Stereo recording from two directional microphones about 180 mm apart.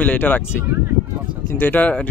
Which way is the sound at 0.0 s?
10° left (ahead or behind).